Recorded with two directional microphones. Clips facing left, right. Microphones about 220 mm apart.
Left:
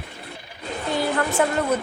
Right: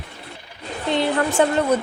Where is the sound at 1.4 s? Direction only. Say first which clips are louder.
Right 4 dB; 25° right (ahead or behind).